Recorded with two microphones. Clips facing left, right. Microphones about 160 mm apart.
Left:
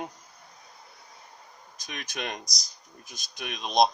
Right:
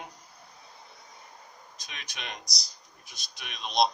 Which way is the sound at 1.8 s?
50° left (ahead or behind).